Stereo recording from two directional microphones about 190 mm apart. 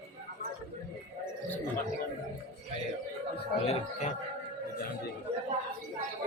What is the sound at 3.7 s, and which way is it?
Speech, 35° left (ahead or behind).